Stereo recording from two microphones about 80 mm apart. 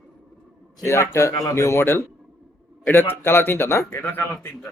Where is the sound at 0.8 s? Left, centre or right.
Left.